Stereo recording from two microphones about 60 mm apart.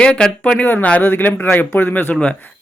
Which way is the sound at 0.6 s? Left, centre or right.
Left.